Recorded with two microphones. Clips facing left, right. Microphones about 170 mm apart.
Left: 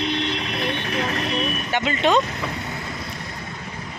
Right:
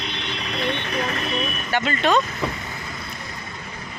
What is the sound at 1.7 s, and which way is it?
Speech, 20° left (ahead or behind).